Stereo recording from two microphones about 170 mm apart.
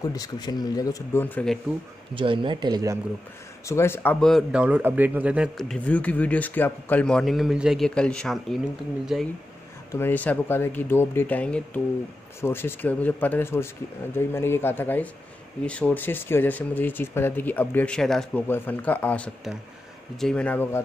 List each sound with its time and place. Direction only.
0.1 s speech: 25° left (ahead or behind); by 1.6 s 5° left (ahead or behind)
2.1 s speech: 30° right (ahead or behind)
3.6 s speech: 15° left (ahead or behind); by 9.3 s 5° right (ahead or behind)
9.9 s speech: 10° left (ahead or behind)